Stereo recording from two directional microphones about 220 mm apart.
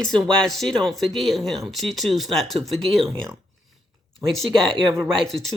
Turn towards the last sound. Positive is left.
turn(degrees=0)  # may be behind; listen again after turning